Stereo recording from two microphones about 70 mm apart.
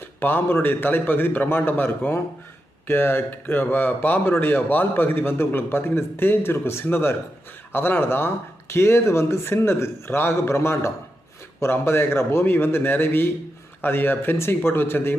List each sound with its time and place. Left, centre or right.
0.2 s a man's voice: left